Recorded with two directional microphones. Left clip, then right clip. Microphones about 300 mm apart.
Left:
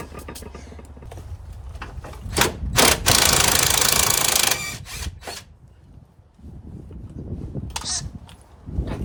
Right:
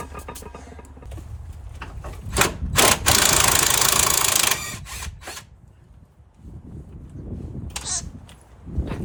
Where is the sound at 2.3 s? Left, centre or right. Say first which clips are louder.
Even; centre.